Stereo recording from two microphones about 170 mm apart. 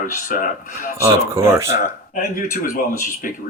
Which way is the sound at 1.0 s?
15° right (ahead or behind).